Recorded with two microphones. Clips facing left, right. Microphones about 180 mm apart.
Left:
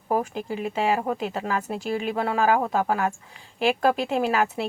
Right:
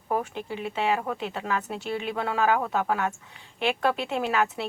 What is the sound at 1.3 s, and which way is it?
Speech, 5° left (ahead or behind).